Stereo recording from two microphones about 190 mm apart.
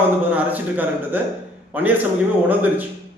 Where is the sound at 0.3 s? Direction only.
10° right (ahead or behind).